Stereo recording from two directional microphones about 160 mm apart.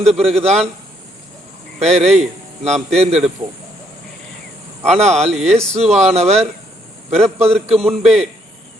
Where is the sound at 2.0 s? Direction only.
40° right (ahead or behind).